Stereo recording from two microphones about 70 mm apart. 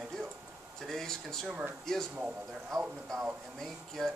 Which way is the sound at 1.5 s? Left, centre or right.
Centre.